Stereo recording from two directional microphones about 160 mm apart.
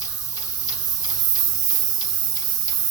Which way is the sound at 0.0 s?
25° left (ahead or behind).